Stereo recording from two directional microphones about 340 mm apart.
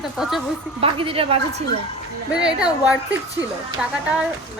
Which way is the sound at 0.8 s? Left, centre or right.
Centre.